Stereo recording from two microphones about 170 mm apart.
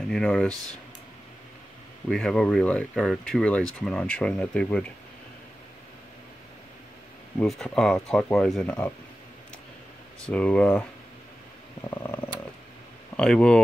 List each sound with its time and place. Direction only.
0.1 s speech: 5° left (ahead or behind)
2.0 s speech: 5° left (ahead or behind)
7.3 s speech: 5° left (ahead or behind)
10.2 s speech: 5° left (ahead or behind)
11.8 s speech: 15° left (ahead or behind)
13.1 s speech: 5° left (ahead or behind)